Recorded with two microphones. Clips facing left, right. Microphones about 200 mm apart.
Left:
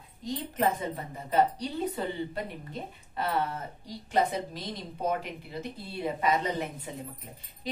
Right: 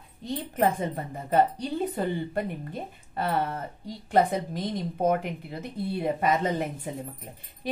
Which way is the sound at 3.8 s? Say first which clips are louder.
Right 4 dB; 55° right (ahead or behind).